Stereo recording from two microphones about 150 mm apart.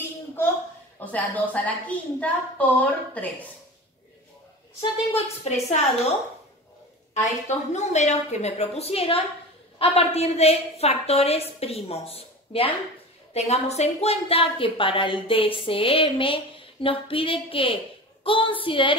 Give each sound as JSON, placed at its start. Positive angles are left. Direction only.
{"t": 0.9, "sound": "a woman's voice", "side_deg": 10}
{"t": 5.1, "sound": "a woman's voice", "side_deg": 45}
{"t": 7.4, "sound": "a woman's voice", "side_deg": 50}